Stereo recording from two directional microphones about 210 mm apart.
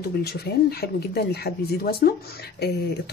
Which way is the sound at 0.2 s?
50° left (ahead or behind).